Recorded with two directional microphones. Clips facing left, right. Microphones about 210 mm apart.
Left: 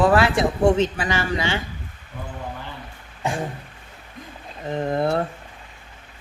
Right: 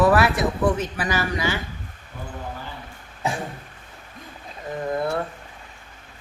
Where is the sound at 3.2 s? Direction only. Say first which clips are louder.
Left 1 dB; centre (ahead or behind).